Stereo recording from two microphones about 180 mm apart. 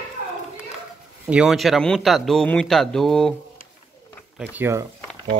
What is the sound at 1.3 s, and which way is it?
Speech, 5° right (ahead or behind).